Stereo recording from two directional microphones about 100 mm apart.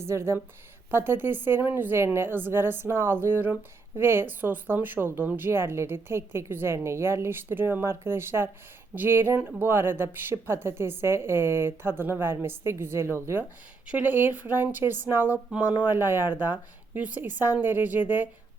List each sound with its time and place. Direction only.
0.0 s a woman's voice: 25° right (ahead or behind)